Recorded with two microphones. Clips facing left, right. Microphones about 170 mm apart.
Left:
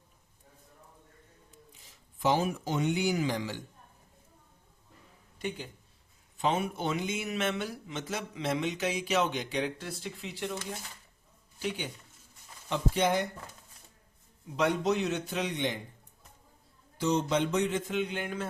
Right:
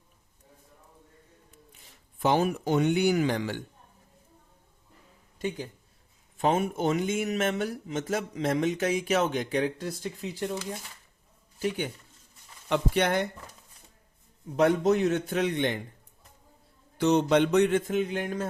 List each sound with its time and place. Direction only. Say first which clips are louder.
1.5 s speech: right 1 dB; 60° right (ahead or behind)
6.3 s speech: right 4 dB; 50° right (ahead or behind)
12.6 s music: right 3 dB; 65° right (ahead or behind)
14.5 s speech: right 5 dB; 50° right (ahead or behind)
17.0 s music: right 6 dB; 65° right (ahead or behind); by 18.4 s 40° right (ahead or behind)